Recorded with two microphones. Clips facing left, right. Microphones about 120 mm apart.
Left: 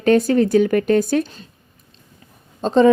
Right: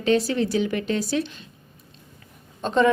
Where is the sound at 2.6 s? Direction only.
35° left (ahead or behind).